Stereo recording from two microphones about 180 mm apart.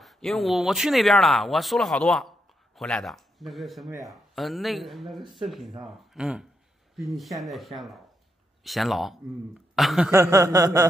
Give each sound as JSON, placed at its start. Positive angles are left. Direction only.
{"t": 0.0, "sound": "speech", "side_deg": 0}
{"t": 10.1, "sound": "chuckle", "side_deg": -15}